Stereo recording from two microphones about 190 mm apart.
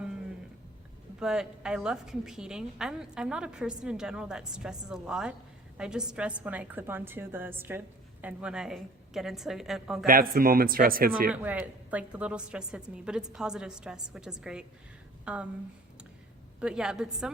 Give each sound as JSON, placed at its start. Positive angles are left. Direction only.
{"t": 1.2, "sound": "a woman's voice", "side_deg": -5}
{"t": 10.1, "sound": "a man's voice", "side_deg": -50}
{"t": 11.3, "sound": "a woman's voice", "side_deg": -10}
{"t": 15.2, "sound": "a sound", "side_deg": -5}
{"t": 16.6, "sound": "a woman's voice", "side_deg": -5}